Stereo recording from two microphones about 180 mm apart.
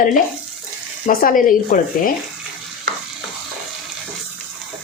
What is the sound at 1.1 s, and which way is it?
Speech, 50° left (ahead or behind).